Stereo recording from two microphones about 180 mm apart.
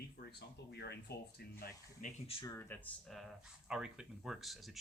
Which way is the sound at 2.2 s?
30° left (ahead or behind).